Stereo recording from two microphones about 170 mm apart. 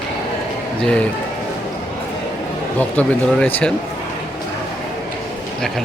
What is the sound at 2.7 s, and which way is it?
Speech, 10° left (ahead or behind).